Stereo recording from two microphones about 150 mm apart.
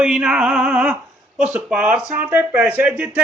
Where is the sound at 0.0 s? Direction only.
5° right (ahead or behind).